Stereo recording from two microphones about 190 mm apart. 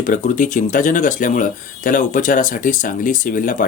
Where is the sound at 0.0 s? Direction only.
45° left (ahead or behind).